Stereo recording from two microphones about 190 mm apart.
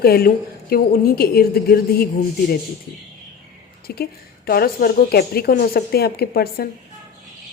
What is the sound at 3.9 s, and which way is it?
A woman's voice, 55° left (ahead or behind).